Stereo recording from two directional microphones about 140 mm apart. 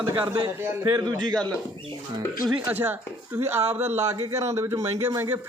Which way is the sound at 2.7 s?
15° right (ahead or behind).